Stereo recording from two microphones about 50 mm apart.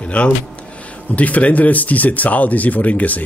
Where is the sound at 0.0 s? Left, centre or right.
Left.